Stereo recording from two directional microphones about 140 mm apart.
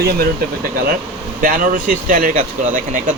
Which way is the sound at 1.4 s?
75° right (ahead or behind).